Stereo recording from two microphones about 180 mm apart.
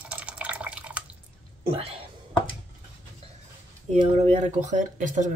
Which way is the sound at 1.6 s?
30° right (ahead or behind).